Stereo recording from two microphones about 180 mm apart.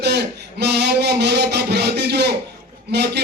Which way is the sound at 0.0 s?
70° right (ahead or behind).